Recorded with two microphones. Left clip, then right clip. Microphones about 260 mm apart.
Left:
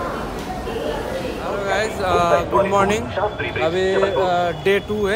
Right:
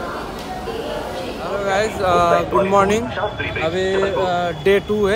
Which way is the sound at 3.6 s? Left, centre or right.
Centre.